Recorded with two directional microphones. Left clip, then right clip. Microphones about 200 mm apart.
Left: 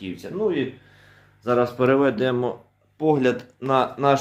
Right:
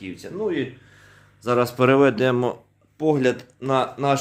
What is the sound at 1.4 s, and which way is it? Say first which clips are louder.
Speech: right 1 dB; 50° right (ahead or behind).